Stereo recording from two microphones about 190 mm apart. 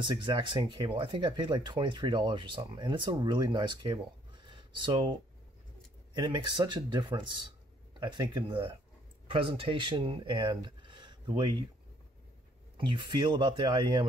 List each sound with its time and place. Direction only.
0.0 s speech: 25° right (ahead or behind)
6.1 s speech: 25° right (ahead or behind)
12.7 s speech: 25° right (ahead or behind)